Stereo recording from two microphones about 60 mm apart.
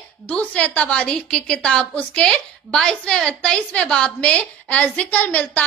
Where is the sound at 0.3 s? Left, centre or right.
Left.